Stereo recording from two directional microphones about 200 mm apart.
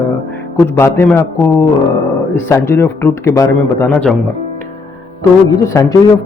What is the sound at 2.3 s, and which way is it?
Speech, 10° left (ahead or behind).